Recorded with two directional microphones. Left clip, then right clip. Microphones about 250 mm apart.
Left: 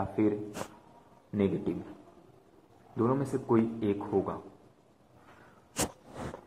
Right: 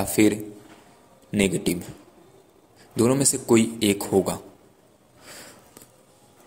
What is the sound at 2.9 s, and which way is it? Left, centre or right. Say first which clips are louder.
A man's voice: right 8 dB; right.